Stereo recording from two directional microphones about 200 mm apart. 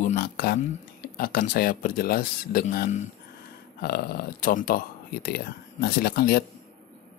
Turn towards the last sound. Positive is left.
turn(degrees=50)  # may be behind; listen again after turning